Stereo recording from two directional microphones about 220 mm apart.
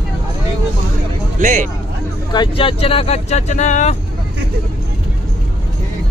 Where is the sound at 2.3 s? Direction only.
20° left (ahead or behind).